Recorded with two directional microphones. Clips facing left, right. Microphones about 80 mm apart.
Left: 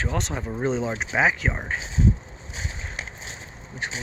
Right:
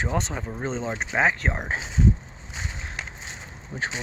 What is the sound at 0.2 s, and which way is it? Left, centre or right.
Speech, centre.